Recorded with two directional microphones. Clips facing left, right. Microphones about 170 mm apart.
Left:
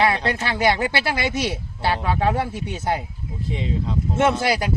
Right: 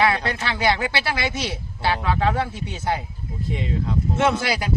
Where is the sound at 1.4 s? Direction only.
15° left (ahead or behind).